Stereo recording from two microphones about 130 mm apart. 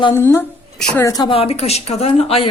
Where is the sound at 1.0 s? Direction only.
30° left (ahead or behind).